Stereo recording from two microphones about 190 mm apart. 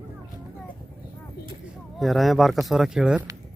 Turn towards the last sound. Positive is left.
turn(degrees=-5)  # may be behind; listen again after turning